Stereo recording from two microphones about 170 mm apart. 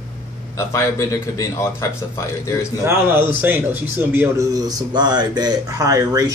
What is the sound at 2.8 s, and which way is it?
A man's voice, 10° right (ahead or behind).